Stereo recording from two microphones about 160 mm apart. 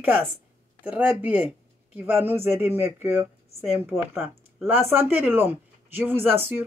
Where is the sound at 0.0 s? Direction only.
10° right (ahead or behind).